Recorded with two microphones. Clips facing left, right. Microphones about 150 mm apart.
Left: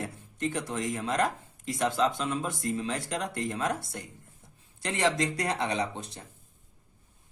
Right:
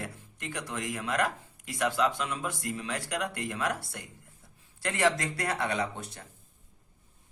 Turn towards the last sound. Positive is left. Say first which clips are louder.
# left 1 dB
turn(degrees=20)  # may be behind; listen again after turning